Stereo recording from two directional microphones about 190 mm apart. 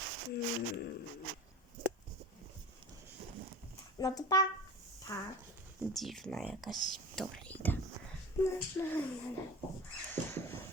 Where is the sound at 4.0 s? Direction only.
20° left (ahead or behind).